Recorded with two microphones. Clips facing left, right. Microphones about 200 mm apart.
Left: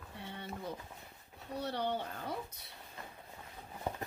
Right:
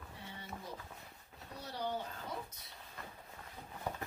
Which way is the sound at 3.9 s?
25° left (ahead or behind).